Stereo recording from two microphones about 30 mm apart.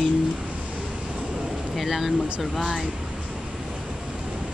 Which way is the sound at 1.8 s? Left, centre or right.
Centre.